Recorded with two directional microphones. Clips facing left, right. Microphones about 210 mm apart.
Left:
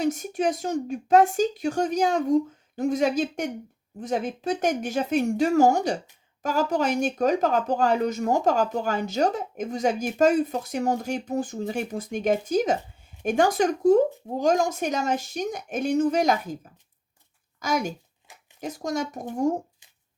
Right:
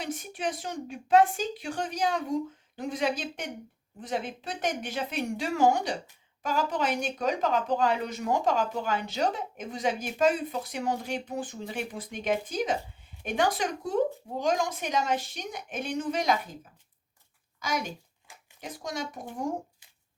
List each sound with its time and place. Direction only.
0.0 s a woman's voice: 45° left (ahead or behind)